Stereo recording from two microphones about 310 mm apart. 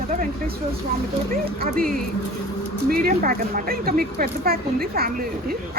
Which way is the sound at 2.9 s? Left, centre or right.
Right.